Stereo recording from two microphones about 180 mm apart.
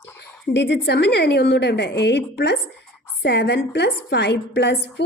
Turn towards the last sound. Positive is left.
turn(degrees=70)  # may be behind; listen again after turning